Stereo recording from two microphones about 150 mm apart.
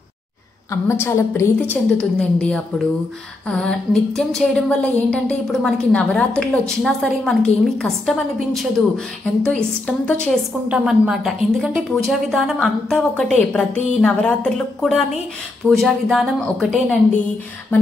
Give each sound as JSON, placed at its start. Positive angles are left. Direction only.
{"t": 0.7, "sound": "a woman's voice", "side_deg": 15}
{"t": 2.0, "sound": "a woman's voice", "side_deg": 5}
{"t": 10.7, "sound": "a woman's voice", "side_deg": -5}